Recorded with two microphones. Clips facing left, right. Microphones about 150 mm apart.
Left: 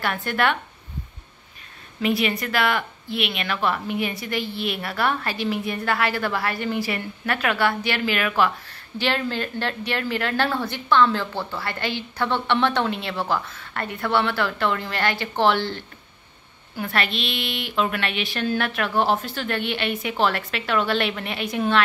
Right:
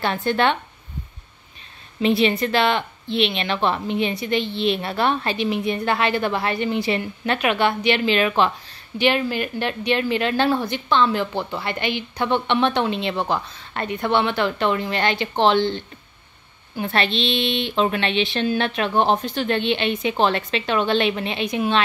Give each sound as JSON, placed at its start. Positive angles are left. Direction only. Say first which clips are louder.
{"t": 0.0, "sound": "speech", "louder": "right 3 dB", "side_deg": -25}
{"t": 2.0, "sound": "speech", "louder": "right 4 dB", "side_deg": -25}